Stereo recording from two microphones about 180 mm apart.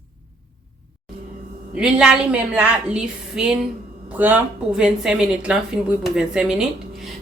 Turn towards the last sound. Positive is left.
turn(degrees=-5)  # may be behind; listen again after turning